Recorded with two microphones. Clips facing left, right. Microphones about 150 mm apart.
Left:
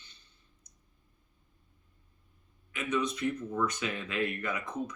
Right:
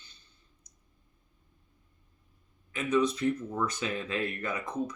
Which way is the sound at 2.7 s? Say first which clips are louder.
Right 5 dB; 30° right (ahead or behind).